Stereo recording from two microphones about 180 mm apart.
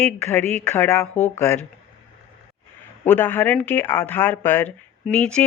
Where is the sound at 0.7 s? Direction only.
10° left (ahead or behind).